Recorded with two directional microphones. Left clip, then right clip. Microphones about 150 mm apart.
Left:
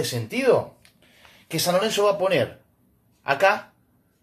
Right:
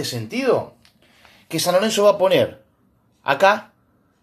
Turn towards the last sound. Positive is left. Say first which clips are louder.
# right 4 dB
turn(degrees=-20)  # may be behind; listen again after turning